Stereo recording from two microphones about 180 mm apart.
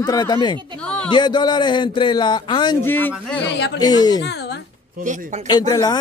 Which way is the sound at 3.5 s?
70° left (ahead or behind).